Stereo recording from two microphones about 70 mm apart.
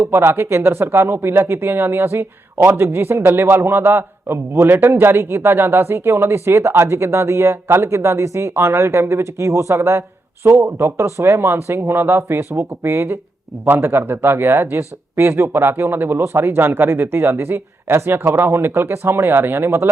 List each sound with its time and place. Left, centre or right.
0.0 s speech: right